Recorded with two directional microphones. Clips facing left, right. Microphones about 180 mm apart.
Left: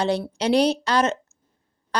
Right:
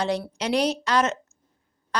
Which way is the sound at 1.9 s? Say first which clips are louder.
Left 3 dB; 35° left (ahead or behind).